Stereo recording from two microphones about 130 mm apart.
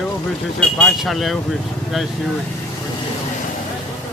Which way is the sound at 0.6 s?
5° left (ahead or behind).